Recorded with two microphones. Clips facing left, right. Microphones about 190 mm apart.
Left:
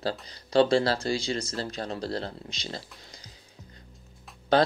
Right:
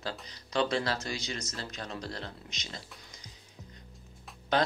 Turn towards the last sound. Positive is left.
turn(degrees=30)  # may be behind; listen again after turning